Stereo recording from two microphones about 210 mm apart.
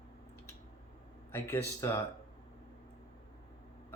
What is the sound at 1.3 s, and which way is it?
Speech, 10° left (ahead or behind).